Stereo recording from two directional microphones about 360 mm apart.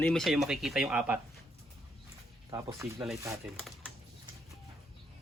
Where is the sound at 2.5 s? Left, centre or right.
Centre.